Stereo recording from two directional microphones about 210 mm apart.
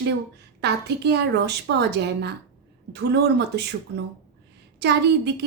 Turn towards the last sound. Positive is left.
turn(degrees=-55)  # may be behind; listen again after turning